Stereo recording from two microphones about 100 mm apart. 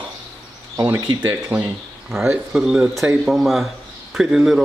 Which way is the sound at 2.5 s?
5° right (ahead or behind).